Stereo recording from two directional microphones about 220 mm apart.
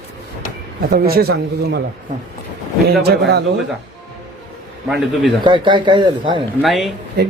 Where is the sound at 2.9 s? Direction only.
45° right (ahead or behind).